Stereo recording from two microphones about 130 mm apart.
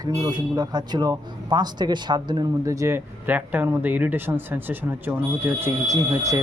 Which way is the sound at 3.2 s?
15° right (ahead or behind).